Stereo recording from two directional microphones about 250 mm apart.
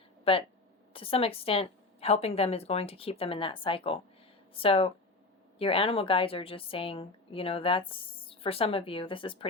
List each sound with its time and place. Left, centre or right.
0.3 s a woman's voice: left